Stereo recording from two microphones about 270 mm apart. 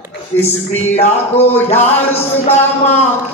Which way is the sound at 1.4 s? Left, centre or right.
Centre.